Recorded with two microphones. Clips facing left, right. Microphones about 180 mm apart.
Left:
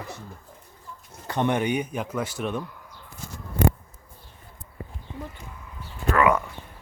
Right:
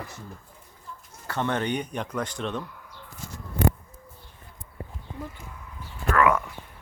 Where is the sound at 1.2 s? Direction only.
15° left (ahead or behind).